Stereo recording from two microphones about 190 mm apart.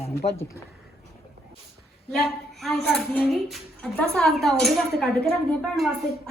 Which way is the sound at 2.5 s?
Centre (ahead or behind).